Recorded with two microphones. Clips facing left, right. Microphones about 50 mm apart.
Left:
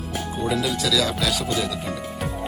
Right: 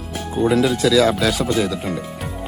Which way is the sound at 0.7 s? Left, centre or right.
Right.